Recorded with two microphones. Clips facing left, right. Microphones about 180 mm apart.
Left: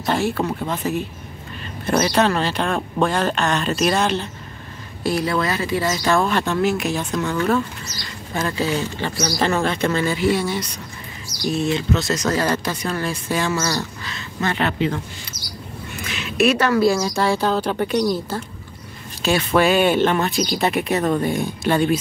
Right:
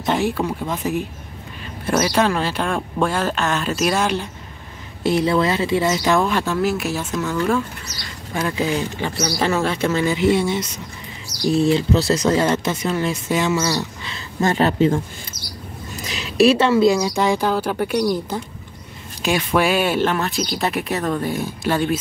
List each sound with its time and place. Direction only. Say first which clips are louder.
0.0 s speech: right 1 dB; 15° right (ahead or behind)
5.0 s speech: right 3 dB; 25° right (ahead or behind)
14.1 s speech: right 5 dB; 40° right (ahead or behind)
16.0 s speech: right 3 dB; 35° right (ahead or behind); by 21.9 s centre (ahead or behind)